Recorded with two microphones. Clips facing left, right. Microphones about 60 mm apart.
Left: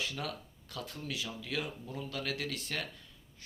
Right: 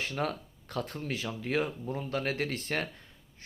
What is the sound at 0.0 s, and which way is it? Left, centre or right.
Speech, right.